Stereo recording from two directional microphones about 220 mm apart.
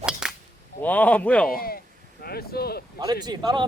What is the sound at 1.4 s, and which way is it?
Speech, 40° left (ahead or behind).